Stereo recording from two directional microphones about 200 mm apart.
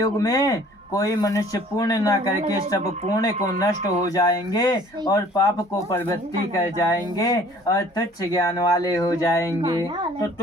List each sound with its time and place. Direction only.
0.0 s speech: 20° left (ahead or behind)
3.6 s speech: 15° left (ahead or behind)